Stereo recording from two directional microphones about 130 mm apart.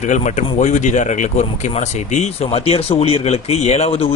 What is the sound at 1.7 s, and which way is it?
A man's voice, 55° left (ahead or behind).